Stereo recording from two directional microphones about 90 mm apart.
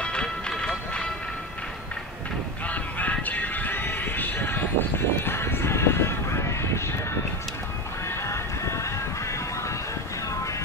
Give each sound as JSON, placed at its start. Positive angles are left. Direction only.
{"t": 0.0, "sound": "music", "side_deg": 10}
{"t": 2.7, "sound": "music", "side_deg": 15}
{"t": 8.8, "sound": "music", "side_deg": 35}